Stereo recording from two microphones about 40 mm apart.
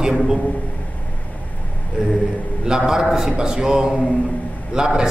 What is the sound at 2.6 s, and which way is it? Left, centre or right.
A man's voice, centre.